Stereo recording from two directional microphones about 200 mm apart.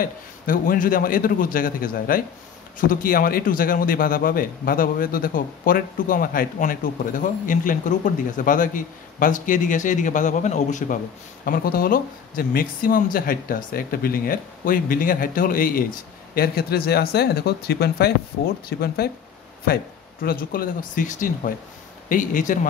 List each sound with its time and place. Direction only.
0.0 s a man's voice: 45° left (ahead or behind)